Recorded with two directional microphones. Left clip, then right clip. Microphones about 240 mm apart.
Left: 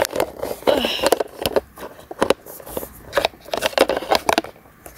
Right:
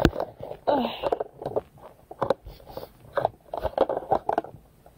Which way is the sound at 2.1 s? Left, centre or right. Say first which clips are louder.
Left 7 dB; left.